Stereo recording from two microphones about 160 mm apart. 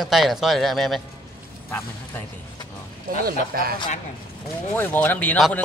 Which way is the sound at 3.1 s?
65° right (ahead or behind).